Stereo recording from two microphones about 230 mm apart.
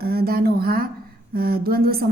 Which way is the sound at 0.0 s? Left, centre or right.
Right.